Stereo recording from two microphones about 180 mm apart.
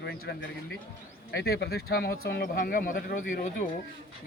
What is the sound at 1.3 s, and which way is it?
A man's voice, 65° left (ahead or behind).